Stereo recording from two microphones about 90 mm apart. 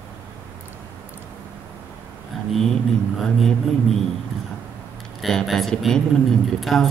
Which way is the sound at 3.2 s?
5° left (ahead or behind).